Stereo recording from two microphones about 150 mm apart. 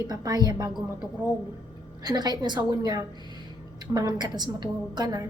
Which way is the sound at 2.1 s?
30° right (ahead or behind).